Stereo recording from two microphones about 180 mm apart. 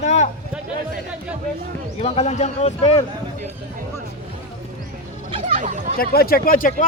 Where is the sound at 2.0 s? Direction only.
35° left (ahead or behind).